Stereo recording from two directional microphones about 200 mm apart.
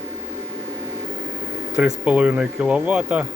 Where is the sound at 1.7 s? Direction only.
5° right (ahead or behind).